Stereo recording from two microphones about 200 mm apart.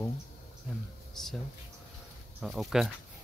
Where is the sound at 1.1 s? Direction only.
Centre (ahead or behind).